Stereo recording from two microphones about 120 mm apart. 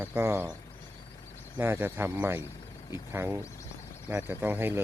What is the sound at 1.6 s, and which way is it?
Speech, 20° right (ahead or behind).